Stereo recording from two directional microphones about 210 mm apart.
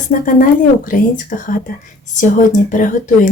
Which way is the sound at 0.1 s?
40° left (ahead or behind).